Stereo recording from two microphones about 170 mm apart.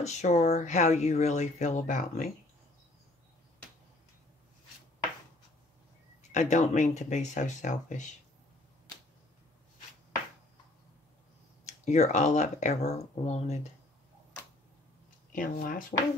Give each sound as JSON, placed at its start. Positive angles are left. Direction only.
{"t": 0.0, "sound": "speech", "side_deg": 45}
{"t": 6.3, "sound": "speech", "side_deg": 45}
{"t": 11.6, "sound": "speech", "side_deg": 45}
{"t": 15.3, "sound": "speech", "side_deg": 50}